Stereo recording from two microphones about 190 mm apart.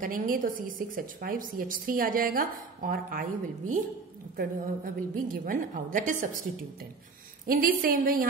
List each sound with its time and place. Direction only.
0.0 s a woman's voice: 45° right (ahead or behind)